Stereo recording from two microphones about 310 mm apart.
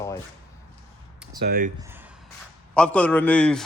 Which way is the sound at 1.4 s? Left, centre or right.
Right.